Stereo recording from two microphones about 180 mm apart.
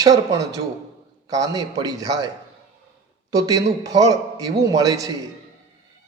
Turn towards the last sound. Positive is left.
turn(degrees=-20)  # may be behind; listen again after turning